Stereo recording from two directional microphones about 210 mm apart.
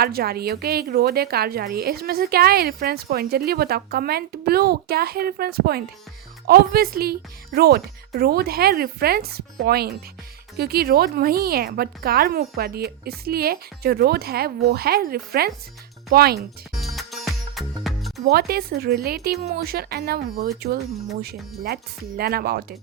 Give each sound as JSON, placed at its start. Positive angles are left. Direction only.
{"t": 0.0, "sound": "a woman's voice", "side_deg": -45}
{"t": 16.7, "sound": "music", "side_deg": 0}
{"t": 18.3, "sound": "a woman's voice", "side_deg": -50}